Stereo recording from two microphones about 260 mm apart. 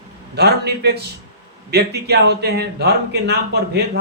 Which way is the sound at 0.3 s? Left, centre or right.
Right.